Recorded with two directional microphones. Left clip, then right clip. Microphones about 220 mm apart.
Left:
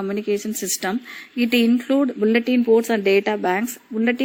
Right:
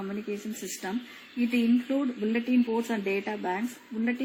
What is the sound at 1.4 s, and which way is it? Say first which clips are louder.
A woman's voice: left 8 dB; 45° left (ahead or behind).